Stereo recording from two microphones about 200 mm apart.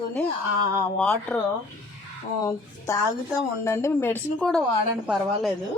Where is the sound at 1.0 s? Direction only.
5° left (ahead or behind).